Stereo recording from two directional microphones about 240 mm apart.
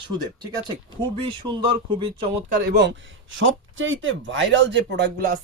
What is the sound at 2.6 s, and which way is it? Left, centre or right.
Speech, right.